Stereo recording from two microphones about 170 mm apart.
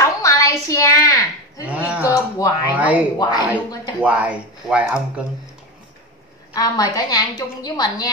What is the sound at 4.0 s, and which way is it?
Speech, 10° right (ahead or behind).